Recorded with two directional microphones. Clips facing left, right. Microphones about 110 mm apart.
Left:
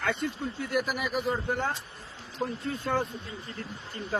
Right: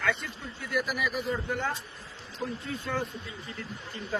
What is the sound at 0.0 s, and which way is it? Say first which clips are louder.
A man's voice: left 2 dB; 50° left (ahead or behind).